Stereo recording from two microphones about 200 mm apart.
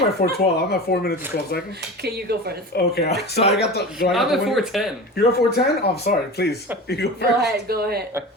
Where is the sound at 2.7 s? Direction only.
50° left (ahead or behind).